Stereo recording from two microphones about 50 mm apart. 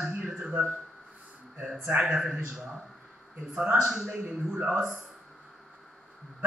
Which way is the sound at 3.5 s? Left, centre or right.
Centre.